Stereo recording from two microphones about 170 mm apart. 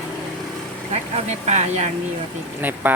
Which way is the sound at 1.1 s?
40° right (ahead or behind).